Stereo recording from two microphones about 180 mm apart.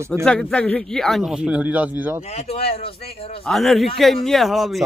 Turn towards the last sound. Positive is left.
turn(degrees=0)  # may be behind; listen again after turning